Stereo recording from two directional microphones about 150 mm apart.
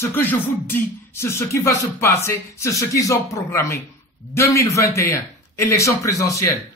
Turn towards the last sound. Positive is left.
turn(degrees=20)  # may be behind; listen again after turning